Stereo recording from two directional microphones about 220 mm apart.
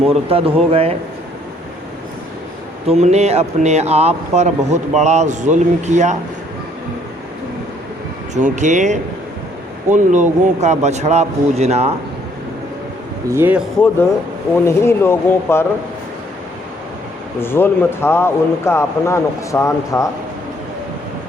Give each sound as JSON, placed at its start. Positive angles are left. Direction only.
{"t": 0.3, "sound": "speech", "side_deg": -25}
{"t": 2.8, "sound": "speech", "side_deg": -30}
{"t": 8.4, "sound": "speech", "side_deg": -35}
{"t": 13.2, "sound": "speech", "side_deg": -10}
{"t": 14.5, "sound": "speech", "side_deg": 10}
{"t": 17.4, "sound": "speech", "side_deg": 10}